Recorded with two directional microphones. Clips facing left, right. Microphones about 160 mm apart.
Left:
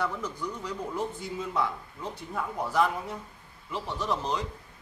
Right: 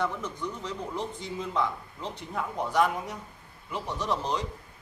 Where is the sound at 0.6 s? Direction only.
5° left (ahead or behind).